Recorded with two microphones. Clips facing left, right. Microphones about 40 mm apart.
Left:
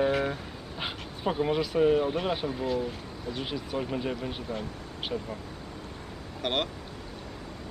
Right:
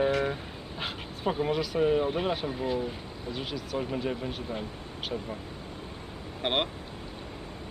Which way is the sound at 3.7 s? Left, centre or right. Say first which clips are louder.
Even; centre.